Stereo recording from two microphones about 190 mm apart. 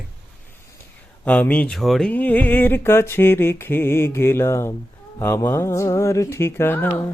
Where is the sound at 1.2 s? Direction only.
10° left (ahead or behind).